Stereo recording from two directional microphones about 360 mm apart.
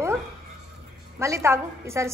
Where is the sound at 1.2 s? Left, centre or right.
Centre.